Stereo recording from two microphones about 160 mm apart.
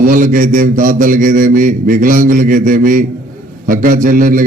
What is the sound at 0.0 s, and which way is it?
A man's voice, 60° right (ahead or behind).